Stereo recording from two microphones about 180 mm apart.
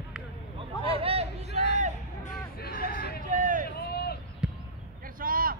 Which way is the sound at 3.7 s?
60° left (ahead or behind).